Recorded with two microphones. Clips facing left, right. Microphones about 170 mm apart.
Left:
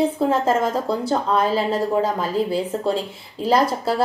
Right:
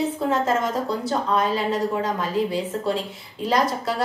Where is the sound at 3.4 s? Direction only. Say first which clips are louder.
Left 3 dB; 30° left (ahead or behind).